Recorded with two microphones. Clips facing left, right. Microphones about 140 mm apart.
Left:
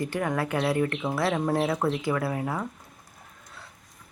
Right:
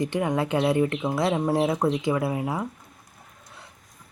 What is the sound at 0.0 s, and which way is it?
Speech, 20° right (ahead or behind).